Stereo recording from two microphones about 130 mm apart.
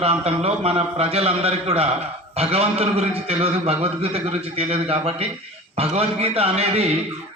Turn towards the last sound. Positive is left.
turn(degrees=-50)  # may be behind; listen again after turning